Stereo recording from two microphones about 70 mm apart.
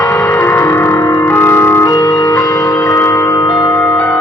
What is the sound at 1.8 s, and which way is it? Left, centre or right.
Music, left.